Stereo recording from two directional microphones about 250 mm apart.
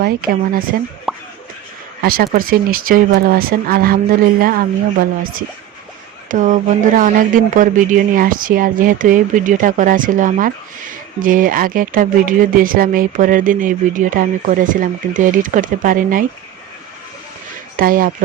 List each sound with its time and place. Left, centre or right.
0.0 s speech: right
1.1 s plop: centre
2.0 s speech: right
17.7 s speech: right